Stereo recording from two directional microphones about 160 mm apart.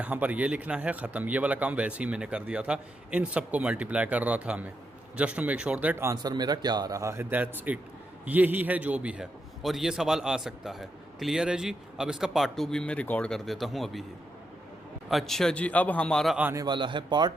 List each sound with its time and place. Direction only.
0.0 s a man's voice: 10° right (ahead or behind)
15.1 s a man's voice: 5° left (ahead or behind)
16.4 s speech: 15° right (ahead or behind)
16.6 s speech: 30° right (ahead or behind)